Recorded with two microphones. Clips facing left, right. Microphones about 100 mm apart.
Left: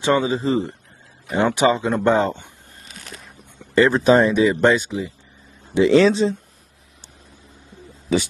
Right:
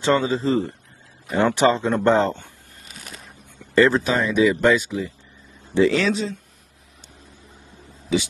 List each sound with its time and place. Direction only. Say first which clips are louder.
0.0 s speech: left 1 dB; 15° left (ahead or behind)
2.9 s a sound: left 1 dB; centre (ahead or behind)
3.7 s speech: even; 15° left (ahead or behind)
4.0 s speech: left 4 dB; 30° left (ahead or behind)
8.1 s speech: left 2 dB; 45° left (ahead or behind)